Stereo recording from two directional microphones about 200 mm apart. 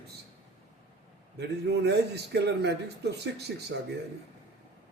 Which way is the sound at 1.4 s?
55° right (ahead or behind).